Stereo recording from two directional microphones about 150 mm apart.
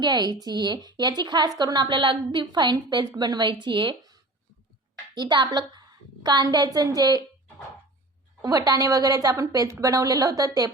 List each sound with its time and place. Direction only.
0.0 s a woman's voice: 30° right (ahead or behind)
5.1 s a woman's voice: 30° right (ahead or behind)
8.4 s a woman's voice: 25° right (ahead or behind)